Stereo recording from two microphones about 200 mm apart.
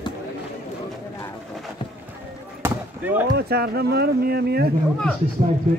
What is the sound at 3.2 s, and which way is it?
Speech, 50° right (ahead or behind).